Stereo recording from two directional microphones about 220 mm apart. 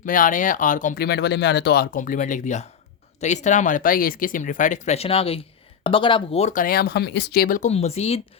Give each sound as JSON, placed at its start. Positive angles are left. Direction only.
{"t": 0.0, "sound": "speech", "side_deg": 35}